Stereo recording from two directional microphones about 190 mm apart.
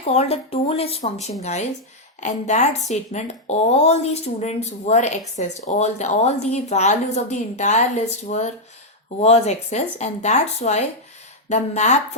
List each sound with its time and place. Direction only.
0.1 s speech: 35° left (ahead or behind)